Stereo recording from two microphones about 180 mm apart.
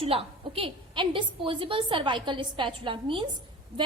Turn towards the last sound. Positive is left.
turn(degrees=-30)  # may be behind; listen again after turning